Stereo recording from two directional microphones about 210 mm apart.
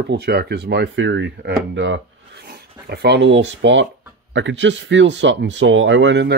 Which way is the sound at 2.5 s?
50° right (ahead or behind).